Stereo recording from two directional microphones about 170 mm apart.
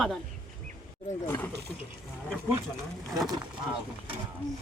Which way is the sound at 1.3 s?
10° left (ahead or behind).